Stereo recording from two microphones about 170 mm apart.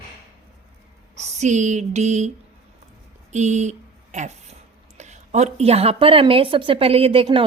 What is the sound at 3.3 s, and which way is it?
Speech, 45° right (ahead or behind).